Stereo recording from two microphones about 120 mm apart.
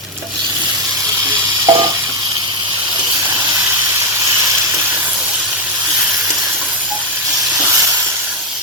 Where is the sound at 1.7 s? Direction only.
35° right (ahead or behind).